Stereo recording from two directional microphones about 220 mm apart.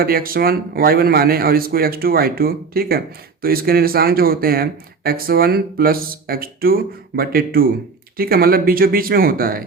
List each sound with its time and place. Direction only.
0.0 s speech: 40° right (ahead or behind)